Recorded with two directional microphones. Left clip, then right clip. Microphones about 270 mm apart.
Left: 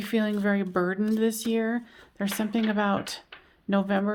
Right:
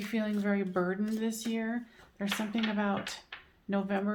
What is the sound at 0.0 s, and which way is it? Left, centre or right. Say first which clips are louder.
Speech: left 7 dB; left.